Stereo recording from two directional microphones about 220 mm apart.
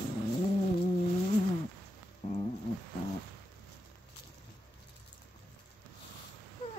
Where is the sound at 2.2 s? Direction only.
25° left (ahead or behind).